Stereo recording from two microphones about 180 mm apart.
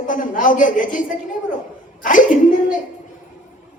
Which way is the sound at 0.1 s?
45° left (ahead or behind).